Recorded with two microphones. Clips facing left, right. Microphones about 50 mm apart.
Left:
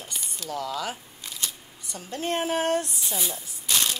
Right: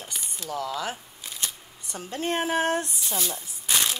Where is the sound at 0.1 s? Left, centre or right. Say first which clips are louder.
Even; centre.